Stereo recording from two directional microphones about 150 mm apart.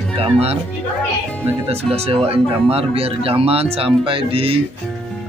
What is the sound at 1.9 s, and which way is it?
Speech, 40° right (ahead or behind).